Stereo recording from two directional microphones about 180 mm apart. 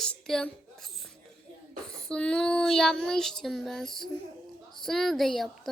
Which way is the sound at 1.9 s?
5° left (ahead or behind).